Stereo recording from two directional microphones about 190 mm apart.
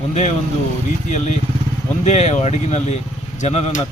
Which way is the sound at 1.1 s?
40° left (ahead or behind).